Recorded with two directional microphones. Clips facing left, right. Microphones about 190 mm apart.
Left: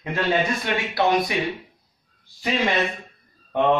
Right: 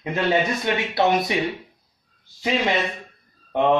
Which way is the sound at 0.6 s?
25° right (ahead or behind).